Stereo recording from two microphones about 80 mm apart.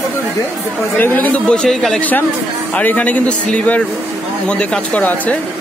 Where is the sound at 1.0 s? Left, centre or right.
Left; by 2.0 s centre.